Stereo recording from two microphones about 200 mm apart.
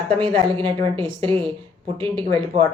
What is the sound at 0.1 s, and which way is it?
Speech, 25° right (ahead or behind).